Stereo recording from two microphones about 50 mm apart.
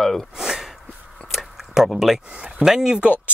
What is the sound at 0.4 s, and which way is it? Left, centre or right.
Snort, centre.